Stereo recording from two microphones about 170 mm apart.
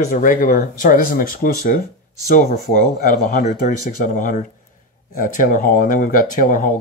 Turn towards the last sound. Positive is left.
turn(degrees=50)  # may be behind; listen again after turning